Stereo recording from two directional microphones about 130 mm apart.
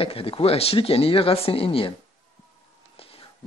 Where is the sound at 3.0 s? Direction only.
50° left (ahead or behind).